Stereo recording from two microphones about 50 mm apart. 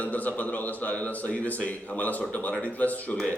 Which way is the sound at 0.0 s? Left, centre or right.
Left.